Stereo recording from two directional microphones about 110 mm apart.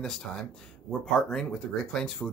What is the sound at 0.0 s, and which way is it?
Speech, centre (ahead or behind).